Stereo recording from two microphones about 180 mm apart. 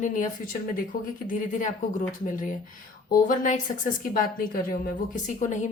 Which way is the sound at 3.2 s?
45° left (ahead or behind).